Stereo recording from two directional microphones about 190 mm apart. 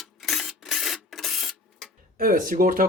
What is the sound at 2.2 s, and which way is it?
Speech, 50° right (ahead or behind).